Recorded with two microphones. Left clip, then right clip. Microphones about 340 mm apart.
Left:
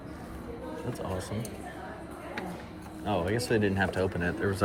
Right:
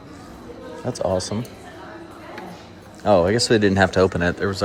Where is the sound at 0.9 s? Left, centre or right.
Centre.